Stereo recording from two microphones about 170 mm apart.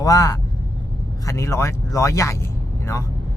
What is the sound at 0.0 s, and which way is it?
Speech, 20° left (ahead or behind).